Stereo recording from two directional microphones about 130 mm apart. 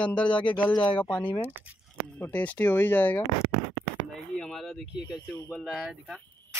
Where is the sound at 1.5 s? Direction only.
15° right (ahead or behind).